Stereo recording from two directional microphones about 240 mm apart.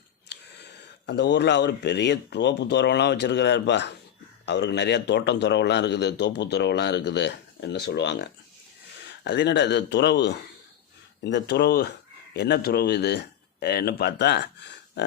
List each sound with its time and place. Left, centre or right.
0.3 s speech: left